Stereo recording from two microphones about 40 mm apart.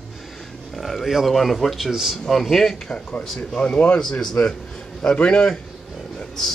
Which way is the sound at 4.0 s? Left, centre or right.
Centre.